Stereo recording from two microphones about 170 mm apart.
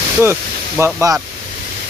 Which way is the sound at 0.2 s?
15° right (ahead or behind).